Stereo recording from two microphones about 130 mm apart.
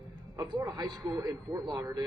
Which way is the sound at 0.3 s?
30° right (ahead or behind).